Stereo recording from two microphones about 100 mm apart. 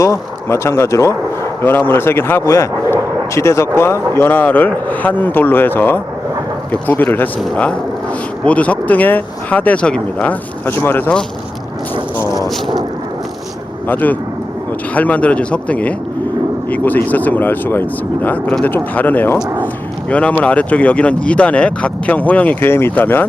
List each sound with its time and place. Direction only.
0.0 s a man's voice: 30° left (ahead or behind)
13.8 s speech: 15° left (ahead or behind)